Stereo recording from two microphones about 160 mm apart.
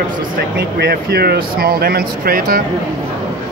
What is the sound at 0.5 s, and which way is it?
Speech, 75° right (ahead or behind).